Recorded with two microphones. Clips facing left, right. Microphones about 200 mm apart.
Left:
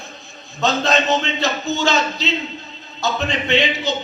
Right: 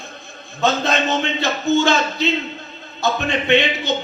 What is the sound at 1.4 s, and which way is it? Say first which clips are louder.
A man's voice: right 3 dB; 55° right (ahead or behind).